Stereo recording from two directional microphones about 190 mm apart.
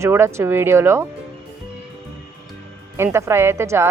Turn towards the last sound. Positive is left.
turn(degrees=-15)  # may be behind; listen again after turning